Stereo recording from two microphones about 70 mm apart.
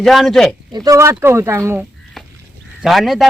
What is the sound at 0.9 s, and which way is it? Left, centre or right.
Speech, right.